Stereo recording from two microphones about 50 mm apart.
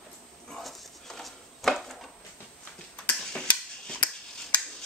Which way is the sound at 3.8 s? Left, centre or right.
Left.